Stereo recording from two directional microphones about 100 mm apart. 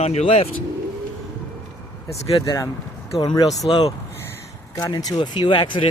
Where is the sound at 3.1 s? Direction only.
60° left (ahead or behind).